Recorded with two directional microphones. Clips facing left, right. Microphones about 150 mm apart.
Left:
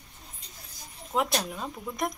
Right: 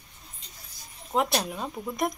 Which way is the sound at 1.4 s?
5° right (ahead or behind).